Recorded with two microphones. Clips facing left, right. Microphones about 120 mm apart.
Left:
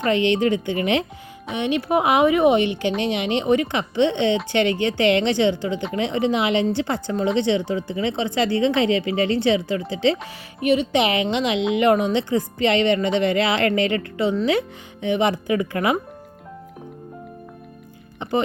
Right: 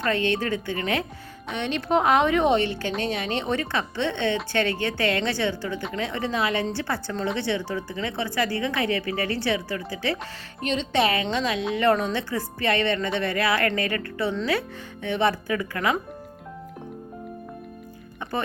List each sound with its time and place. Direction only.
0.1 s a woman's voice: 20° left (ahead or behind)
10.6 s a woman's voice: 10° left (ahead or behind)
18.2 s speech: 20° left (ahead or behind)